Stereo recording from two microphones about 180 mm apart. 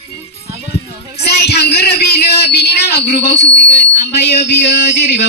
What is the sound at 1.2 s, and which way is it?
Speech, 65° left (ahead or behind).